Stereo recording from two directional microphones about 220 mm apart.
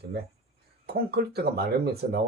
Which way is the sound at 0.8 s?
45° right (ahead or behind).